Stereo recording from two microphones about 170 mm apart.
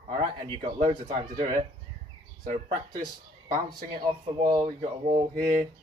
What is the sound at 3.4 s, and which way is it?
Speech, 60° right (ahead or behind).